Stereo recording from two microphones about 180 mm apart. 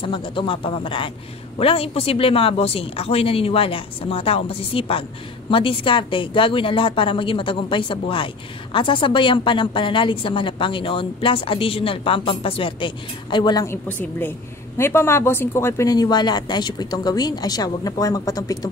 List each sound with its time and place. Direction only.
0.0 s a woman's voice: 30° left (ahead or behind)
13.8 s a woman's voice: 10° left (ahead or behind)